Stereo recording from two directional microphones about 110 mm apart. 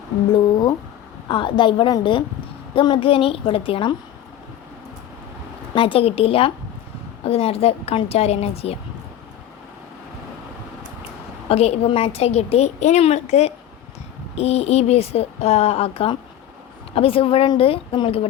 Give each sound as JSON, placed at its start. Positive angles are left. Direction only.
{"t": 1.3, "sound": "a woman's voice", "side_deg": 50}
{"t": 5.7, "sound": "a woman's voice", "side_deg": 55}
{"t": 11.4, "sound": "a woman's voice", "side_deg": 70}
{"t": 14.3, "sound": "a woman's voice", "side_deg": 70}